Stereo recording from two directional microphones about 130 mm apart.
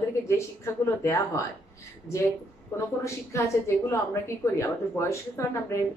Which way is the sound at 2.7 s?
20° left (ahead or behind).